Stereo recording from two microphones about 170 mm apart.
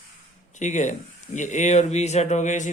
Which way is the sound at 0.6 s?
45° left (ahead or behind).